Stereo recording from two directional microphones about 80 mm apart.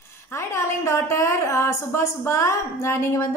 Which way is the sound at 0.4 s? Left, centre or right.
Left.